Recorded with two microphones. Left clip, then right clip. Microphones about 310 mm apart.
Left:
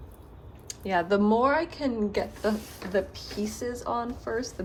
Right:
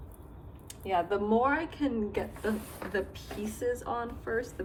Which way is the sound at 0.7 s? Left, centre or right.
Left.